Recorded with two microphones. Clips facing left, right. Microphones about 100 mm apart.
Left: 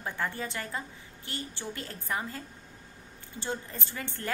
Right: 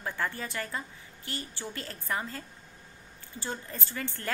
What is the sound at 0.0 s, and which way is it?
A woman's voice, 20° left (ahead or behind).